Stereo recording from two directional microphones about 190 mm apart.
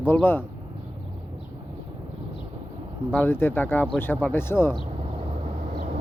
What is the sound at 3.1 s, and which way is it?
Speech, 10° left (ahead or behind).